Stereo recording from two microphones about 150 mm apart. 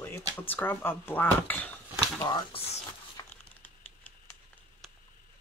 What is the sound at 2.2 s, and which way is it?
Speech, 30° left (ahead or behind).